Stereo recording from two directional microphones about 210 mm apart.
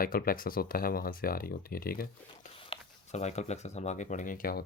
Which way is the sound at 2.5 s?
25° left (ahead or behind).